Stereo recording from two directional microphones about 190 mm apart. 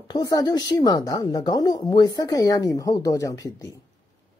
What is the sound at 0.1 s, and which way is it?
A woman's voice, 20° left (ahead or behind).